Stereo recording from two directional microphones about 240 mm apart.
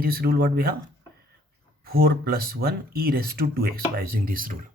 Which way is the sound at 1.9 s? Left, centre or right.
Right.